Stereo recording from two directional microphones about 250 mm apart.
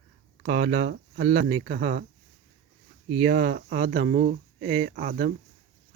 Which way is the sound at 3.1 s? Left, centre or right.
Right.